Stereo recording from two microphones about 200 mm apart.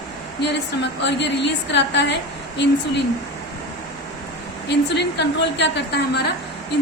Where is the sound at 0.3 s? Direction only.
60° left (ahead or behind).